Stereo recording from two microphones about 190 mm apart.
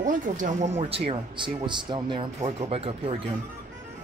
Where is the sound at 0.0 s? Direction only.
45° right (ahead or behind).